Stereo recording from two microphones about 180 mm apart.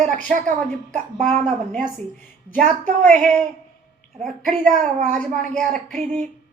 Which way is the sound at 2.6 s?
45° right (ahead or behind).